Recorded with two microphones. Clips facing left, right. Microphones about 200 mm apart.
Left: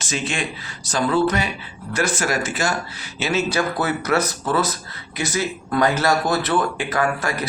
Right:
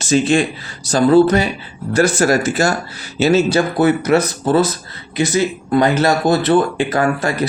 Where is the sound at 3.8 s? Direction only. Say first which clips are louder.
Right 8 dB; 20° right (ahead or behind).